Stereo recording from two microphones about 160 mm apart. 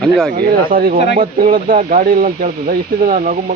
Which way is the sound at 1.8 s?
50° right (ahead or behind).